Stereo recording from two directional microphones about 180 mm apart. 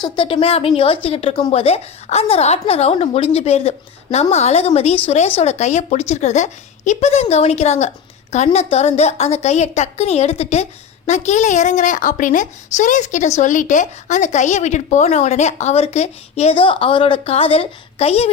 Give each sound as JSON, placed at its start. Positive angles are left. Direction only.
{"t": 0.0, "sound": "a woman's voice", "side_deg": 30}